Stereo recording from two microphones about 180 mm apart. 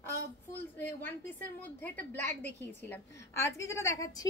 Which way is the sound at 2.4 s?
10° left (ahead or behind).